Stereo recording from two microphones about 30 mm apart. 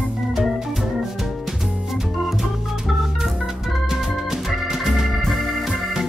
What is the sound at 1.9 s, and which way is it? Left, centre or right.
Organ, centre.